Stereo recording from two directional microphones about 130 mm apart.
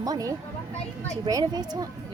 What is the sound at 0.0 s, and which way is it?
Speech, 25° right (ahead or behind).